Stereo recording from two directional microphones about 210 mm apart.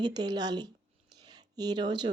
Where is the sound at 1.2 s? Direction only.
20° right (ahead or behind).